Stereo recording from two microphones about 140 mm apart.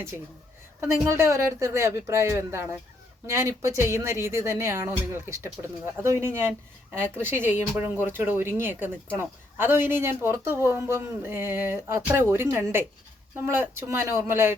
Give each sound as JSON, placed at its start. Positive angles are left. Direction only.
{"t": 1.0, "sound": "speech", "side_deg": -20}